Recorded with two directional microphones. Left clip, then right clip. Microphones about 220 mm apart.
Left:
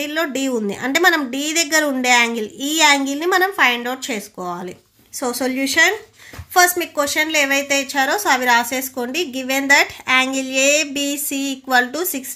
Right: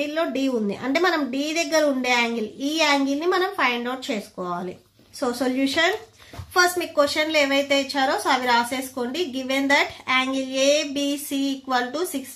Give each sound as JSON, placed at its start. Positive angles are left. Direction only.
{"t": 0.0, "sound": "a woman's voice", "side_deg": 25}